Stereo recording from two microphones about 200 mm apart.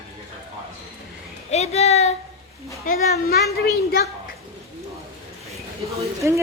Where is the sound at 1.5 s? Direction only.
35° left (ahead or behind).